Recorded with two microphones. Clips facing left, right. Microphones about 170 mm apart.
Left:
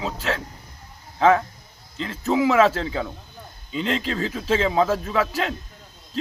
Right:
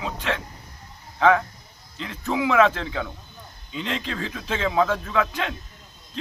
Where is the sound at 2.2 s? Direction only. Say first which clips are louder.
Left 2 dB; 30° left (ahead or behind).